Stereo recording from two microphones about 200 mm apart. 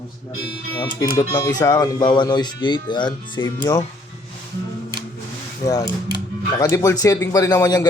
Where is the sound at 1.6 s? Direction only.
20° left (ahead or behind).